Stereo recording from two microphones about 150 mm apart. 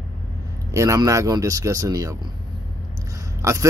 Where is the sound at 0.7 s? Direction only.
20° right (ahead or behind).